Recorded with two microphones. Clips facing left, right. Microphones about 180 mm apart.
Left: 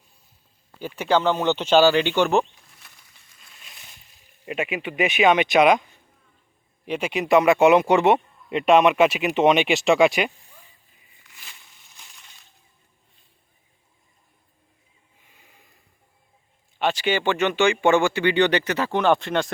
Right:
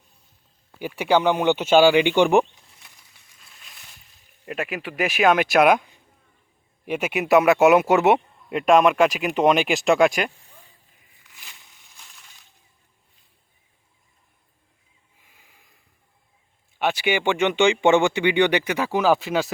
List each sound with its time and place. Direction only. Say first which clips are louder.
0.8 s speech: right 1 dB; 10° right (ahead or behind)
4.4 s speech: left 2 dB; centre (ahead or behind)
6.8 s speech: right 1 dB; 10° right (ahead or behind)
11.9 s crushing: even; centre (ahead or behind)
16.7 s speech: even; 10° right (ahead or behind)